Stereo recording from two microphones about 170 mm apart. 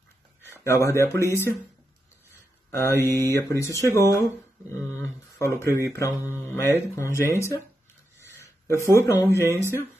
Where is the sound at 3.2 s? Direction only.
15° left (ahead or behind).